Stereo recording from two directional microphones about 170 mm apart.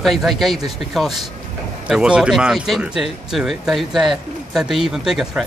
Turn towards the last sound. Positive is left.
turn(degrees=0)  # may be behind; listen again after turning